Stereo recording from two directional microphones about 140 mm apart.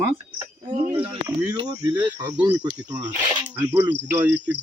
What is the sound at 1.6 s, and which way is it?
Speech, 30° right (ahead or behind).